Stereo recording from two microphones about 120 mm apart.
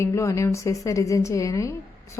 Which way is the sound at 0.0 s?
25° left (ahead or behind).